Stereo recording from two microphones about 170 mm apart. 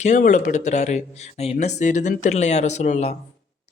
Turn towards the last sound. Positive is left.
turn(degrees=40)  # may be behind; listen again after turning